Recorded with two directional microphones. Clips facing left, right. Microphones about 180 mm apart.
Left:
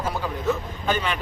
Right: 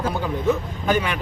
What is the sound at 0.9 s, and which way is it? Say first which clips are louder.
Speech: right 3 dB; 10° right (ahead or behind).